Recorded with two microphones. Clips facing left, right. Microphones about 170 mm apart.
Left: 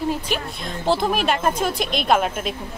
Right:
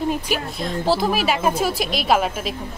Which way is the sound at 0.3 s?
Centre (ahead or behind).